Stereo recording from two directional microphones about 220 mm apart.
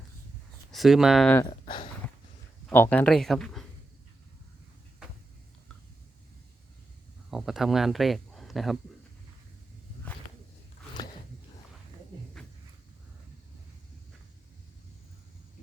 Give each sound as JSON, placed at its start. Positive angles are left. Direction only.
{"t": 0.7, "sound": "speech", "side_deg": 0}
{"t": 1.4, "sound": "speech", "side_deg": 20}
{"t": 2.6, "sound": "speech", "side_deg": 5}
{"t": 7.3, "sound": "speech", "side_deg": 0}
{"t": 10.1, "sound": "walk", "side_deg": 5}